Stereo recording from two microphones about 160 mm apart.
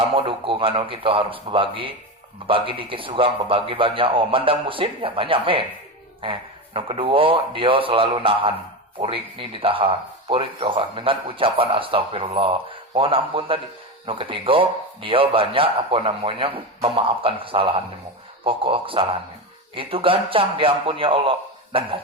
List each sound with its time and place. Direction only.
0.1 s speech: 35° right (ahead or behind)
6.7 s speech: 35° right (ahead or behind)